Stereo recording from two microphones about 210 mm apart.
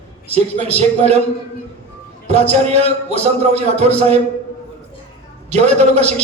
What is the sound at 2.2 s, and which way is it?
A man's voice, 30° right (ahead or behind).